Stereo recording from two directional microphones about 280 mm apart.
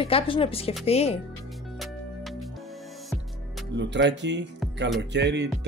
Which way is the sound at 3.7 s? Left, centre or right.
Right.